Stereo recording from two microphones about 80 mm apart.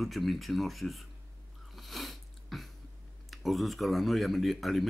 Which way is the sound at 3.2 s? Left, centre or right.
Centre.